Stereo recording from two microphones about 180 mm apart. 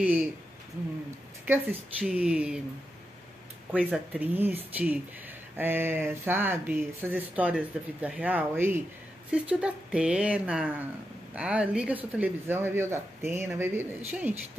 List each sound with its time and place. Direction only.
0.0 s speech: 10° right (ahead or behind)
1.7 s speech: 10° right (ahead or behind)
3.7 s speech: 5° right (ahead or behind)